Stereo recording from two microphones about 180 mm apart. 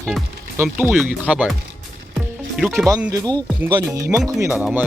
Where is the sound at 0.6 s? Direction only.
10° right (ahead or behind).